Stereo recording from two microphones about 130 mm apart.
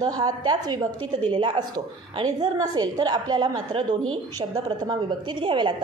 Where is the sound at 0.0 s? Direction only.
30° right (ahead or behind).